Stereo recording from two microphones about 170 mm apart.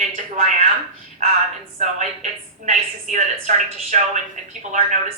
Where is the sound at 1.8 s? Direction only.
45° right (ahead or behind).